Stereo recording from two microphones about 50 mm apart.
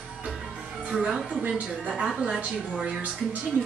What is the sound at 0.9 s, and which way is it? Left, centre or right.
A woman's voice, centre.